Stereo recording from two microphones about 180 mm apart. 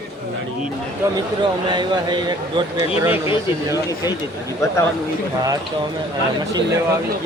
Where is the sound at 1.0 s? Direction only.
15° right (ahead or behind).